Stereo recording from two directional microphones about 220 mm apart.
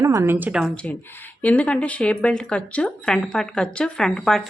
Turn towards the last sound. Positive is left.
turn(degrees=0)  # may be behind; listen again after turning